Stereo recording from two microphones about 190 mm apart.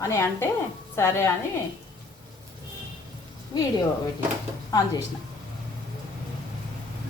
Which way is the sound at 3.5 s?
20° left (ahead or behind).